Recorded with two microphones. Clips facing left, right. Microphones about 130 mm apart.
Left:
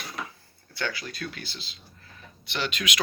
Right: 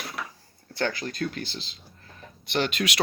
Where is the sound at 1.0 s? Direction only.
40° right (ahead or behind).